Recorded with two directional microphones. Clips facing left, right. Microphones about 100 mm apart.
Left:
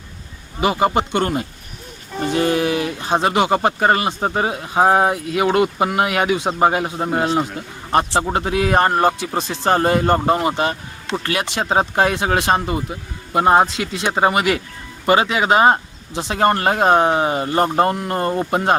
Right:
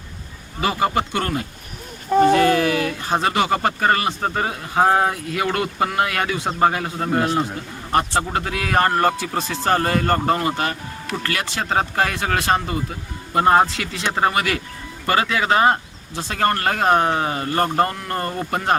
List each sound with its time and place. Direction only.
0.6 s speech: 20° left (ahead or behind)